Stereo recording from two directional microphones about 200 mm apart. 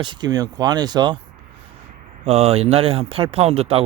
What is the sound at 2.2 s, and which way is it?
Speech, 30° right (ahead or behind).